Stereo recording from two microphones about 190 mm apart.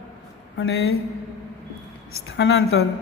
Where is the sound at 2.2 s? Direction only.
85° left.